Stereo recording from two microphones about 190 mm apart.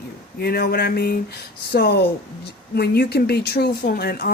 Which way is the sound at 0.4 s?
55° left (ahead or behind).